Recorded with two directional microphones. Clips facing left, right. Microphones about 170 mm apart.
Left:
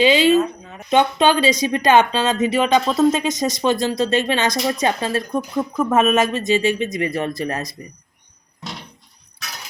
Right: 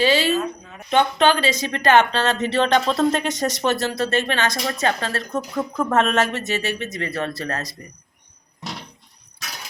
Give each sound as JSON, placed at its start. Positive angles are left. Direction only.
{"t": 0.0, "sound": "speech", "side_deg": 15}